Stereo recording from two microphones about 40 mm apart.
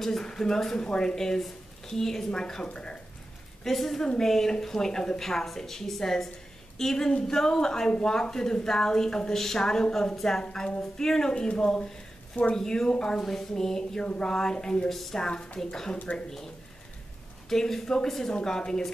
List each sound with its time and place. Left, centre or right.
0.0 s a woman's voice: centre
0.7 s a woman's voice: left
3.6 s a woman's voice: centre
14.9 s a woman's voice: centre
15.1 s speech: left
15.6 s a woman's voice: centre
16.1 s speech: left
17.5 s a woman's voice: centre
18.3 s a woman's voice: centre